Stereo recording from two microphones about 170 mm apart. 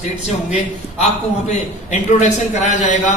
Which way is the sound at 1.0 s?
45° left (ahead or behind).